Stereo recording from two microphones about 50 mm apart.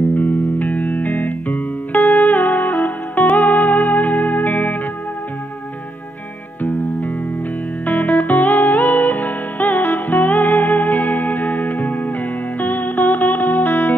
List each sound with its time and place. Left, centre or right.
0.1 s music: left
7.8 s music: left